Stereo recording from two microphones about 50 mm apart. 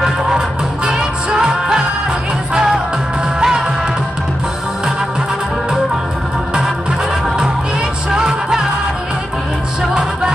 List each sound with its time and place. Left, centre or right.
0.8 s music: centre
3.3 s music: centre
8.1 s music: centre